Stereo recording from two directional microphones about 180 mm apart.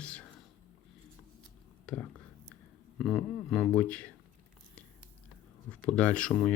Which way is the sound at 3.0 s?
Centre (ahead or behind).